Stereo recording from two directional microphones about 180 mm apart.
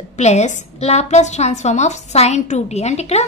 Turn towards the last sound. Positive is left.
turn(degrees=35)  # may be behind; listen again after turning